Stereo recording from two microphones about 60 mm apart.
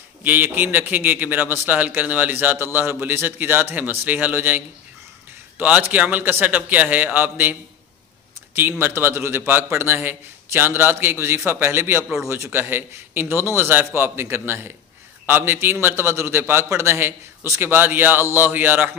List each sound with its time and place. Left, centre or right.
0.2 s a man's voice: right
8.5 s a man's voice: right